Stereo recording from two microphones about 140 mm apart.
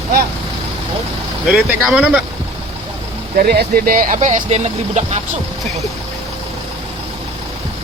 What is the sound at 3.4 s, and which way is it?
Speech, 90° right.